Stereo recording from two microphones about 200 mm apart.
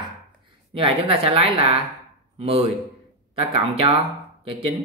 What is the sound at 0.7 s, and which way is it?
Speech, 25° right (ahead or behind).